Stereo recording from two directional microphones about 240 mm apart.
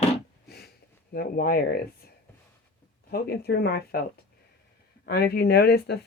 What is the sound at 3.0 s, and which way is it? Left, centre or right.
Speech, left.